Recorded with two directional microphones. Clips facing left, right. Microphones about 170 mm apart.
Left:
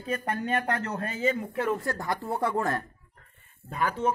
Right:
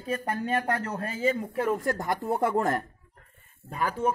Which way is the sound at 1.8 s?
20° right (ahead or behind).